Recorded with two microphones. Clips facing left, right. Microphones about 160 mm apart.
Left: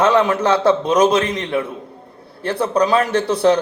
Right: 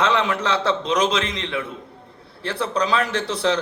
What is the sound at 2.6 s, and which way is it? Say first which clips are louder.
Speech: left 6 dB; 60° left (ahead or behind).